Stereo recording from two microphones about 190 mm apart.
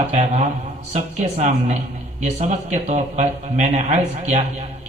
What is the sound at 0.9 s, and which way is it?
A man's voice, 35° right (ahead or behind).